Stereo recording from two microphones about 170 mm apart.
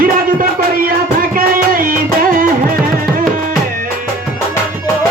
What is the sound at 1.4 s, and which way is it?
Music, 55° right (ahead or behind).